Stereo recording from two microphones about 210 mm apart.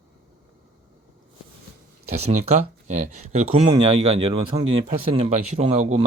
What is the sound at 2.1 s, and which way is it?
Speech, 30° right (ahead or behind).